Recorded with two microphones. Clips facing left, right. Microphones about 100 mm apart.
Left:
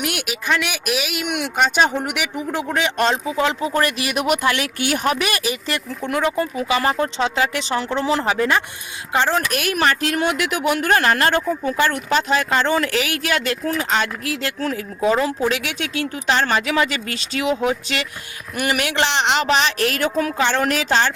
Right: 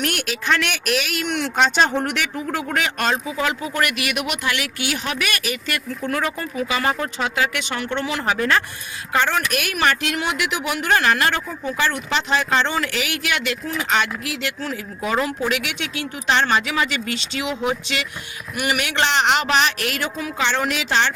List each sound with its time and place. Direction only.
0.0 s speech: 10° left (ahead or behind)
2.7 s speech: 25° left (ahead or behind); by 5.1 s 40° left (ahead or behind)
5.1 s speech: 30° left (ahead or behind)
15.2 s speech: 30° left (ahead or behind)
18.7 s speech: 35° left (ahead or behind)
20.0 s a woman's voice: 45° left (ahead or behind)